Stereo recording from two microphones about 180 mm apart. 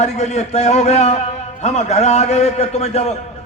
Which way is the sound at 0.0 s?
40° left (ahead or behind).